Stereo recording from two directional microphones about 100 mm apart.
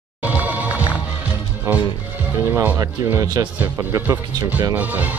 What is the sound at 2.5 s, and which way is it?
Speech, 20° right (ahead or behind).